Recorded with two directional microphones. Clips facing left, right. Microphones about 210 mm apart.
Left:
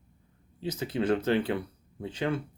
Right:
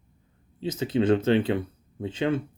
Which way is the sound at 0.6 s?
25° right (ahead or behind).